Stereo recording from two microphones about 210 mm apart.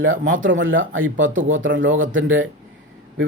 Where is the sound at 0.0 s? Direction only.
70° right (ahead or behind).